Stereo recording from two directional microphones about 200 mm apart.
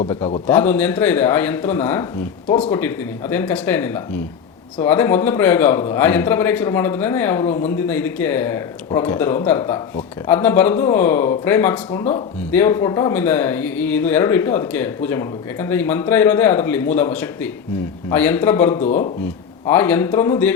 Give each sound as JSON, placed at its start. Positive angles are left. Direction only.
{"t": 0.2, "sound": "a man's voice", "side_deg": 30}
{"t": 0.4, "sound": "a man's voice", "side_deg": 10}